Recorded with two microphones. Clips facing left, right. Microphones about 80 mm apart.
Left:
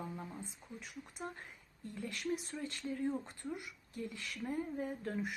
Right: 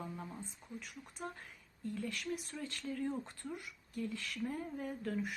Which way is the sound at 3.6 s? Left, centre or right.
Left.